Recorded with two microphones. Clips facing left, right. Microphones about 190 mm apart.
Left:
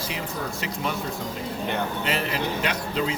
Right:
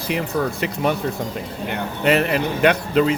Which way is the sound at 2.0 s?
60° right (ahead or behind).